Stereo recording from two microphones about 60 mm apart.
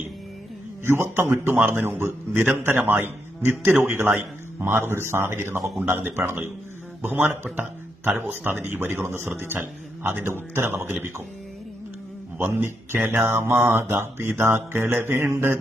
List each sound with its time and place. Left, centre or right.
0.9 s speech: right
12.4 s speech: right